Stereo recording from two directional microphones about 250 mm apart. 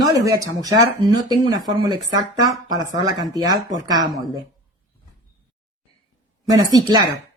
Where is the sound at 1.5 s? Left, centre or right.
Centre.